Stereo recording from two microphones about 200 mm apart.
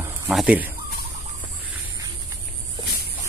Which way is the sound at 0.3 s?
5° right (ahead or behind).